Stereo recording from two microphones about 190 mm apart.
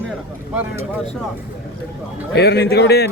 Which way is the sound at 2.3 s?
55° left (ahead or behind).